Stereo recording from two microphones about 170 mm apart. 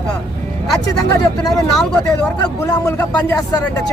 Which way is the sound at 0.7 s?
20° left (ahead or behind).